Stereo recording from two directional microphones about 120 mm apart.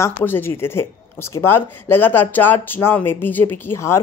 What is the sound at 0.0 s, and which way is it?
Speech, 20° left (ahead or behind).